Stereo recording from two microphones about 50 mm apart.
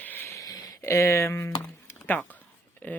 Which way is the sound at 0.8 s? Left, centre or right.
Left.